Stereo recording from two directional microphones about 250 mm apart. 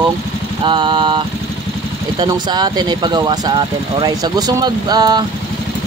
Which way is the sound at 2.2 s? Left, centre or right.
Centre.